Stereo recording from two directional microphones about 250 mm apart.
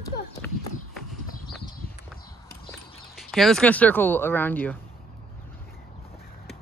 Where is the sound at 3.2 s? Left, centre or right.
Centre.